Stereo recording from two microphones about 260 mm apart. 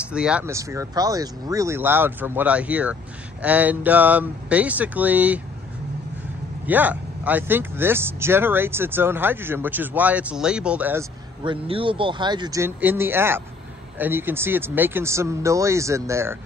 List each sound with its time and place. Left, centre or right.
0.0 s speech: centre
6.6 s speech: centre
11.4 s speech: centre